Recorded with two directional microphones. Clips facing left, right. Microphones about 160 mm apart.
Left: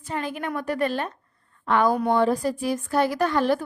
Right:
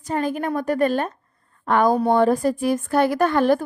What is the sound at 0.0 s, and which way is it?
A woman's voice, 45° right (ahead or behind).